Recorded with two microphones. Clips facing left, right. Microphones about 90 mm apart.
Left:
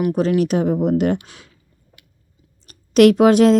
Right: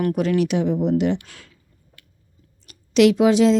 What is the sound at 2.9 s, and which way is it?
Speech, 50° left (ahead or behind).